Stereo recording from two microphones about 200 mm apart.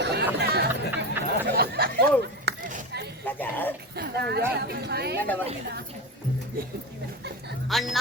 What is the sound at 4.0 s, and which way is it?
Speech, 55° right (ahead or behind).